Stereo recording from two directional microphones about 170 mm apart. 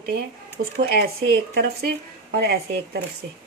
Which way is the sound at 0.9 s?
65° right (ahead or behind).